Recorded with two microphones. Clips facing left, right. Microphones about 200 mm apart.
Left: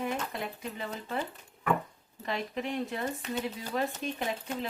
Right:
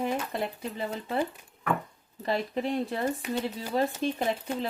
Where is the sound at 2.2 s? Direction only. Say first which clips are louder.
Right 5 dB; 35° right (ahead or behind).